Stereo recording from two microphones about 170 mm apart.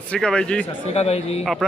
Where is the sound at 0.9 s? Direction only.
40° left (ahead or behind).